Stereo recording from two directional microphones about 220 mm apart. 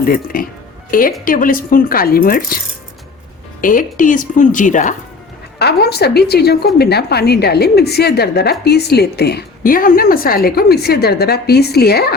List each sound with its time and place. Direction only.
0.0 s a woman's voice: 40° left (ahead or behind)
3.6 s a woman's voice: 40° left (ahead or behind)
5.5 s a woman's voice: 45° left (ahead or behind)